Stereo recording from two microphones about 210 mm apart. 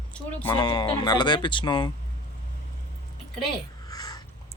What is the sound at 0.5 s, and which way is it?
Speech, 25° left (ahead or behind).